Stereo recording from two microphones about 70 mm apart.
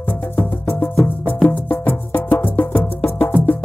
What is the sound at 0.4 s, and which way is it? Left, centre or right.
Music, left.